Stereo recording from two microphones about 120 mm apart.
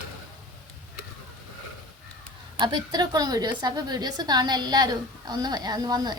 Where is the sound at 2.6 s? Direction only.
35° right (ahead or behind).